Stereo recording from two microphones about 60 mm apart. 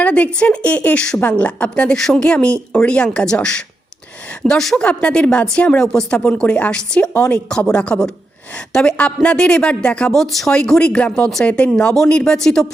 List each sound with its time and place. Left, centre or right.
0.0 s a sound: left
0.3 s speech: left
4.8 s speech: centre
5.8 s speech: centre
10.2 s speech: centre
10.5 s speech: centre